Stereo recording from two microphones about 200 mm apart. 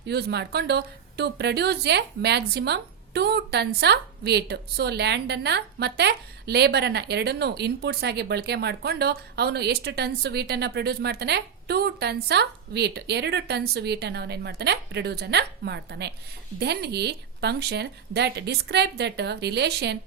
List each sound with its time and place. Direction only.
0.0 s a woman's voice: 55° right (ahead or behind)